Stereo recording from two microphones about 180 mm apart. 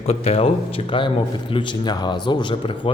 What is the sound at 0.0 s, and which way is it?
A man's voice, 35° left (ahead or behind).